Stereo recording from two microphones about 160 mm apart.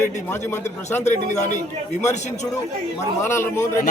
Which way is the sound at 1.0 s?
45° left (ahead or behind).